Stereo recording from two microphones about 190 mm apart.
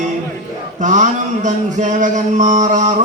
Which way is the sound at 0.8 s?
40° right (ahead or behind).